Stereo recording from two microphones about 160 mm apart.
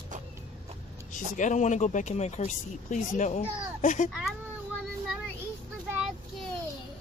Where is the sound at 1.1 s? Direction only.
50° left (ahead or behind).